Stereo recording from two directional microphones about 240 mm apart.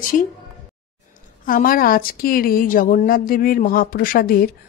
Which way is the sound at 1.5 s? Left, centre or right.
Left.